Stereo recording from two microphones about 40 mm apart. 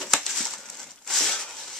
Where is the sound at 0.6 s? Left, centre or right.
Centre.